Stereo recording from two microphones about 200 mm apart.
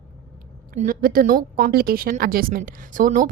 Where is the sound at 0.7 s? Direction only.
45° right (ahead or behind).